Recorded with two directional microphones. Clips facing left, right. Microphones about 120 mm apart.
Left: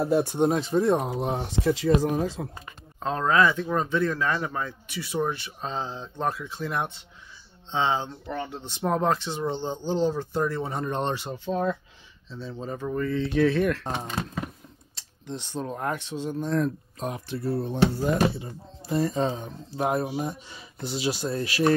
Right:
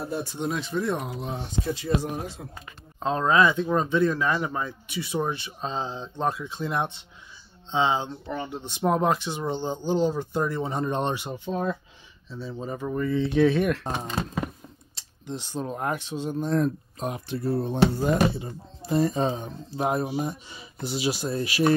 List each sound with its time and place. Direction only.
0.0 s speech: 75° left (ahead or behind); by 0.5 s 60° left (ahead or behind)
0.5 s speech: 40° left (ahead or behind)
1.2 s speech: 75° left (ahead or behind)
2.4 s speech: 75° left (ahead or behind)
3.0 s speech: 20° right (ahead or behind)
15.0 s a sound: 5° right (ahead or behind)
15.6 s speech: 15° right (ahead or behind)